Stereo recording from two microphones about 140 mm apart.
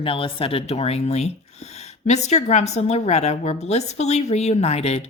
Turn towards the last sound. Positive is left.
turn(degrees=50)  # may be behind; listen again after turning